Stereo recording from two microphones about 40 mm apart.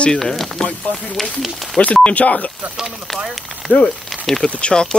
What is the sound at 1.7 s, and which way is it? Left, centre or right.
Speech, left.